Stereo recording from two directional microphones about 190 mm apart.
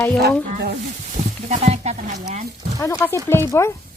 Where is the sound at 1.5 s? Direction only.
35° right (ahead or behind).